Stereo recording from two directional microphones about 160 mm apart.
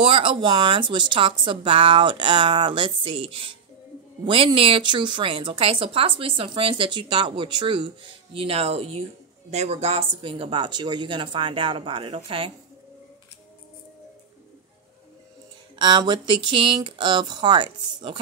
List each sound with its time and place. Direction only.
0.0 s a woman's voice: 35° right (ahead or behind)
15.8 s speech: 30° right (ahead or behind)